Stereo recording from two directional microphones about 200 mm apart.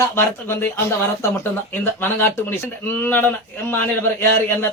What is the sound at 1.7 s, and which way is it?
Speech, 10° left (ahead or behind).